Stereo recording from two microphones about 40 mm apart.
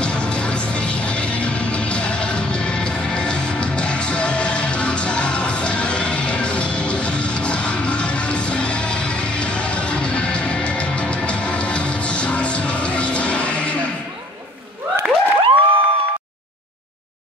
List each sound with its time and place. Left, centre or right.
0.0 s music: left